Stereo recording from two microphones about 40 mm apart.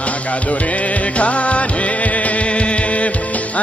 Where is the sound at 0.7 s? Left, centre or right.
Left.